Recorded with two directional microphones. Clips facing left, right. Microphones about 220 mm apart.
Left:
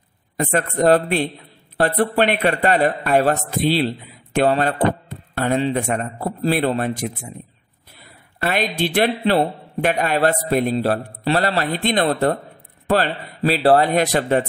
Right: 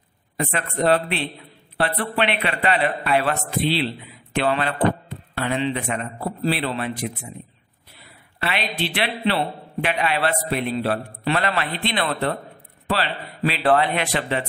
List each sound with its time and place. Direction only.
0.4 s a man's voice: 45° left (ahead or behind)